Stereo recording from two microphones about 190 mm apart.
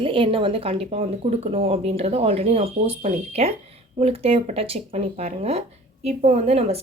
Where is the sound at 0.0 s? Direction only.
30° right (ahead or behind).